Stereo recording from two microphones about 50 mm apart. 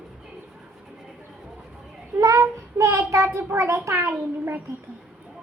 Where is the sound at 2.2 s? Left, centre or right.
Right.